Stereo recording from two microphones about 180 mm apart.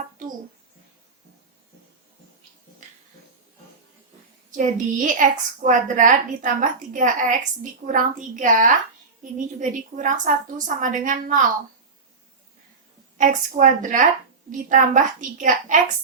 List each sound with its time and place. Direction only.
4.5 s a woman's voice: 45° right (ahead or behind)
13.1 s a woman's voice: 45° right (ahead or behind)